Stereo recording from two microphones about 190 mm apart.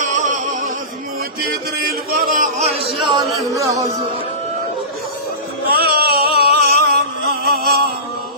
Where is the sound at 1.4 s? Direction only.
55° right (ahead or behind); by 3.8 s 15° right (ahead or behind).